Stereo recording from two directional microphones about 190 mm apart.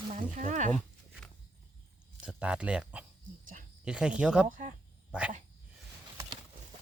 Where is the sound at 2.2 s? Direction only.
5° right (ahead or behind).